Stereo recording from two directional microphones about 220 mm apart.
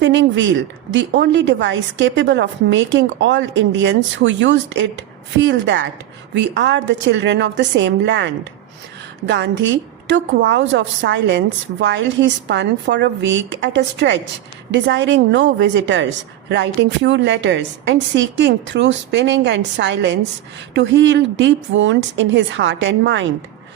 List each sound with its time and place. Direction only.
0.0 s a woman's voice: 55° right (ahead or behind)